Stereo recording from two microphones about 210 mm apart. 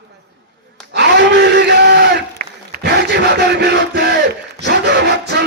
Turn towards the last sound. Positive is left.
turn(degrees=-55)  # may be behind; listen again after turning